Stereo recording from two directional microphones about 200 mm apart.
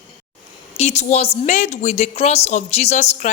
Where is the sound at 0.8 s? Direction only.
35° left (ahead or behind).